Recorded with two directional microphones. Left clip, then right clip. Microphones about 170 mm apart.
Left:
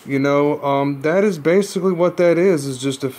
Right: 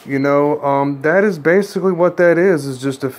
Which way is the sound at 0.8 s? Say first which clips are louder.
Right 3 dB; 20° left (ahead or behind).